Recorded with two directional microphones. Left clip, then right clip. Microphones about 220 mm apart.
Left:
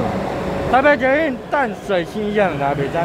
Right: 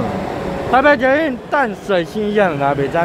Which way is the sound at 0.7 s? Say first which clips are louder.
Right 2 dB; 10° right (ahead or behind).